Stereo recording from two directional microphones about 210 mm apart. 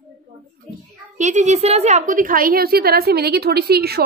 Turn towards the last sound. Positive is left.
turn(degrees=-50)  # may be behind; listen again after turning